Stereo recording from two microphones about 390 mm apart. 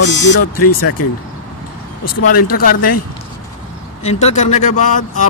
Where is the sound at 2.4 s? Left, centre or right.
Left.